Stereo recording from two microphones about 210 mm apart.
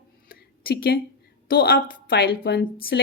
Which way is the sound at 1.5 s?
45° left (ahead or behind).